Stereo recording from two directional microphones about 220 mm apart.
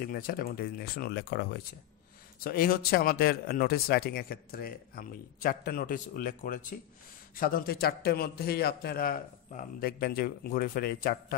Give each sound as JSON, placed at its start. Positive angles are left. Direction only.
{"t": 0.0, "sound": "speech", "side_deg": 40}